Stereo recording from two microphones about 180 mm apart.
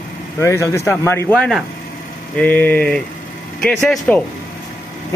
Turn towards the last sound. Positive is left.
turn(degrees=5)  # may be behind; listen again after turning